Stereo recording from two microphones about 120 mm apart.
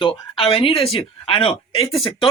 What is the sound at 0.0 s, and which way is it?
Speech, 45° left (ahead or behind).